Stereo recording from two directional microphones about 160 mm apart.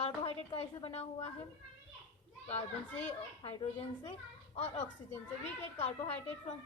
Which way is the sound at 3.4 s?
35° left (ahead or behind).